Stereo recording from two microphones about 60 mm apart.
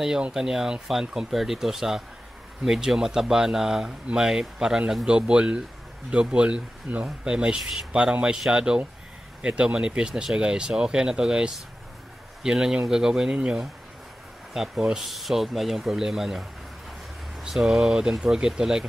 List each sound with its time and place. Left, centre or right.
0.2 s speech: centre